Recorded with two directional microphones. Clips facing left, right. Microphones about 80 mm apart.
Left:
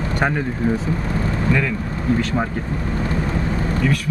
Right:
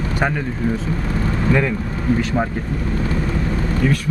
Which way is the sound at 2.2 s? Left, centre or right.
Centre.